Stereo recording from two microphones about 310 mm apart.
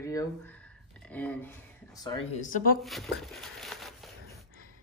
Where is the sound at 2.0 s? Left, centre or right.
Centre.